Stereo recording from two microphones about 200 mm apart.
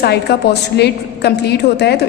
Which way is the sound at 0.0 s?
55° left (ahead or behind).